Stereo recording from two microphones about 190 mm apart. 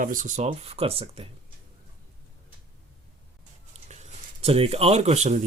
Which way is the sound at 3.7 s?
35° right (ahead or behind).